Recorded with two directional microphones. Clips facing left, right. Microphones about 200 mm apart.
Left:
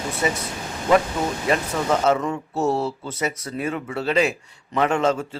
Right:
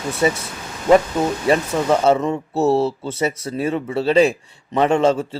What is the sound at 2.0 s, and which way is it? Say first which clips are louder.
A man's voice: right 4 dB; 25° right (ahead or behind).